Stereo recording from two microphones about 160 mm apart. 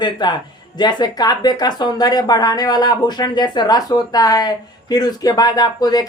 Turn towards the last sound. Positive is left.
turn(degrees=25)  # may be behind; listen again after turning